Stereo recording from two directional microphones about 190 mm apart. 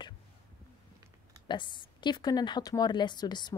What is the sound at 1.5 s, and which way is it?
A woman's voice, 25° left (ahead or behind).